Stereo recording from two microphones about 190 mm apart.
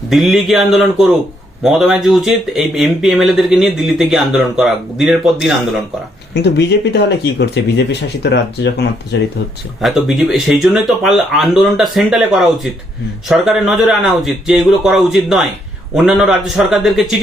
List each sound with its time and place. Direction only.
0.1 s speech: centre (ahead or behind)
6.3 s speech: 60° left (ahead or behind)
9.8 s speech: centre (ahead or behind)